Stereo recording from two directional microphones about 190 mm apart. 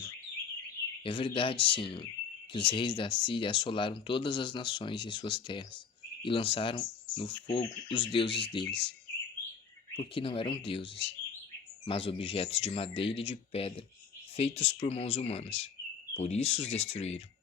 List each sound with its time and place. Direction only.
1.0 s speech: 25° left (ahead or behind)
9.9 s speech: 30° left (ahead or behind)